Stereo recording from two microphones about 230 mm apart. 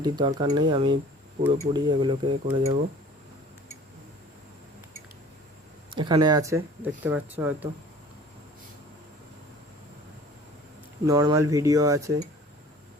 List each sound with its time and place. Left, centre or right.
0.0 s speech: centre
5.9 s speech: centre
11.0 s speech: centre